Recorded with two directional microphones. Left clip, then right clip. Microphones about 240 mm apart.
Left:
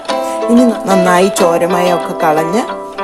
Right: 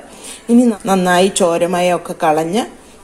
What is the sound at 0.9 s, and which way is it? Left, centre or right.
Speech, centre.